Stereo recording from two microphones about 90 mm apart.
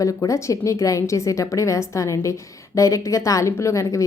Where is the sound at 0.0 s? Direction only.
40° left (ahead or behind).